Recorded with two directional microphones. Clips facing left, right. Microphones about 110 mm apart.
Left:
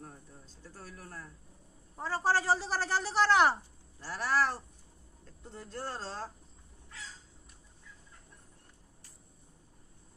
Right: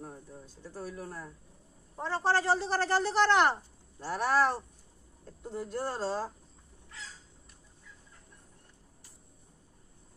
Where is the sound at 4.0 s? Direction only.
20° right (ahead or behind).